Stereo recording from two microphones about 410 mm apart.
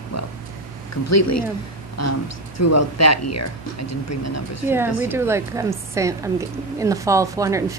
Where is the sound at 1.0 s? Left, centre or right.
Left.